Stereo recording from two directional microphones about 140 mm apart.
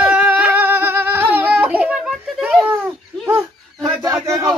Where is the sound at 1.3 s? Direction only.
10° right (ahead or behind).